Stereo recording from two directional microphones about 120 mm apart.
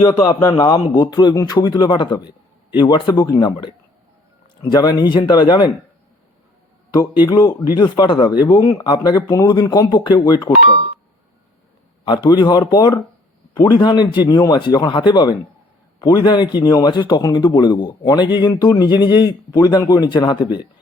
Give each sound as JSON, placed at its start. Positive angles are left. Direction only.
{"t": 0.0, "sound": "a man's voice", "side_deg": 35}
{"t": 7.2, "sound": "a man's voice", "side_deg": 30}
{"t": 12.0, "sound": "a man's voice", "side_deg": 35}